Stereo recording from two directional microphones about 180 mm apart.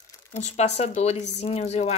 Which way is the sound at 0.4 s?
40° left (ahead or behind).